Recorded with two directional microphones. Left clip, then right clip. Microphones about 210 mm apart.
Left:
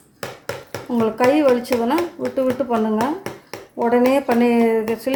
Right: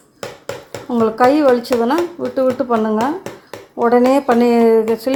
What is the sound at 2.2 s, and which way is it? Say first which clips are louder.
Speech: right 2 dB; 35° right (ahead or behind).